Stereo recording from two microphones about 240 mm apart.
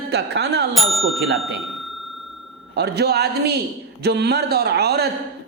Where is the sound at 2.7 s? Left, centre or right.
Right.